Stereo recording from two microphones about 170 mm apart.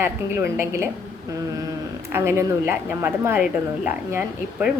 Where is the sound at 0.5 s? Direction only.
15° right (ahead or behind).